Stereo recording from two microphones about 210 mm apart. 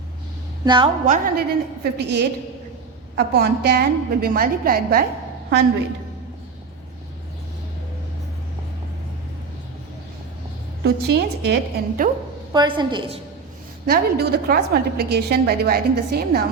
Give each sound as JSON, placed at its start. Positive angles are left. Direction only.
{"t": 0.6, "sound": "a woman's voice", "side_deg": -20}
{"t": 1.0, "sound": "a woman's voice", "side_deg": -40}
{"t": 10.8, "sound": "a woman's voice", "side_deg": -50}
{"t": 12.5, "sound": "a woman's voice", "side_deg": -20}
{"t": 13.8, "sound": "a woman's voice", "side_deg": -50}